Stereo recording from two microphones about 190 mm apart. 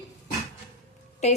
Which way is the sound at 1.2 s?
35° left (ahead or behind).